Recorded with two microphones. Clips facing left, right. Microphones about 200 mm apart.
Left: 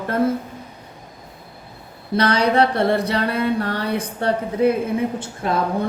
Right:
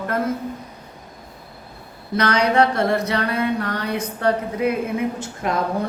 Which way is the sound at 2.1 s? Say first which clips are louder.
Left 1 dB; 30° left (ahead or behind).